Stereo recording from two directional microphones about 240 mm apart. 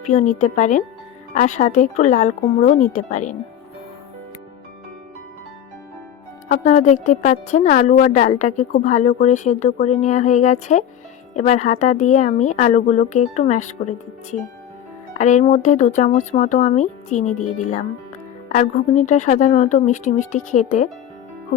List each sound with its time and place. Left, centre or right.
0.0 s a woman's voice: left
6.5 s a woman's voice: left
15.2 s a woman's voice: left